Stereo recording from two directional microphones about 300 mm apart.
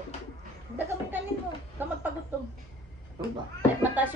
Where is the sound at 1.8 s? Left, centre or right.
Centre.